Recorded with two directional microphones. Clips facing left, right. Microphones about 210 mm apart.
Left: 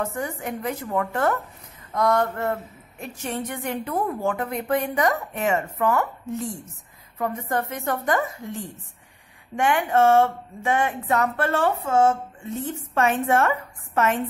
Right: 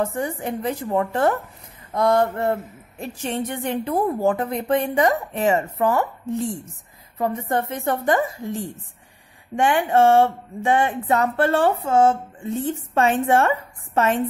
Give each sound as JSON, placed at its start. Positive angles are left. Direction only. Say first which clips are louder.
{"t": 0.0, "sound": "speech", "louder": "right 4 dB", "side_deg": -30}
{"t": 9.6, "sound": "speech", "louder": "right 3 dB", "side_deg": -30}